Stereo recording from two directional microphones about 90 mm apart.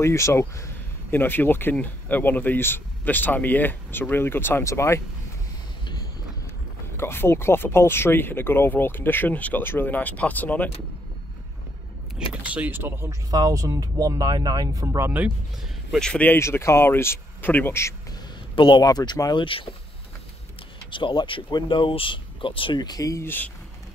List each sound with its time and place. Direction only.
0.0 s speech: 30° left (ahead or behind)
7.0 s speech: 25° left (ahead or behind)
12.4 s speech: 20° right (ahead or behind)
13.3 s speech: 40° right (ahead or behind)
16.0 s speech: 10° left (ahead or behind)
16.3 s speech: 30° left (ahead or behind)
18.5 s speech: 65° left (ahead or behind)
18.8 s speech: 45° left (ahead or behind)
19.3 s speech: 75° left (ahead or behind)
20.9 s speech: 60° left (ahead or behind)
22.8 s speech: 45° left (ahead or behind)
23.2 s speech: 20° left (ahead or behind)